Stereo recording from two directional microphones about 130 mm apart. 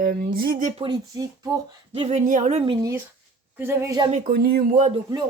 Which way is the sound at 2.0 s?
50° right (ahead or behind).